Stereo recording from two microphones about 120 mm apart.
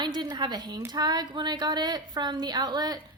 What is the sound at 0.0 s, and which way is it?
A woman's voice, 35° right (ahead or behind).